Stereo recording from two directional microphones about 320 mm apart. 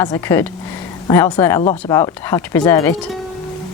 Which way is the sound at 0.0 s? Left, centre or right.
Centre.